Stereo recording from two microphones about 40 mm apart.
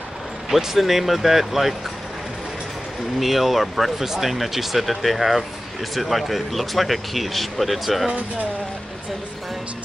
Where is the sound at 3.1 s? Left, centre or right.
Centre.